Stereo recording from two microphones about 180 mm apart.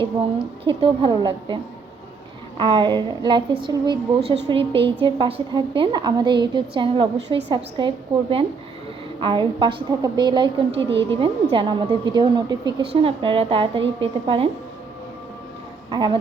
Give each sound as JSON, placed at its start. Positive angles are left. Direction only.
{"t": 0.6, "sound": "a woman's voice", "side_deg": -30}
{"t": 2.6, "sound": "a woman's voice", "side_deg": -25}
{"t": 15.9, "sound": "a woman's voice", "side_deg": -25}